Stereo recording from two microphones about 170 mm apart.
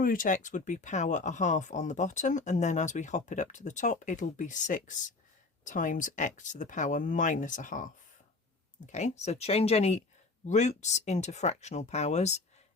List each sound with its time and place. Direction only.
0.0 s speech: 55° left (ahead or behind)
8.9 s speech: 45° left (ahead or behind)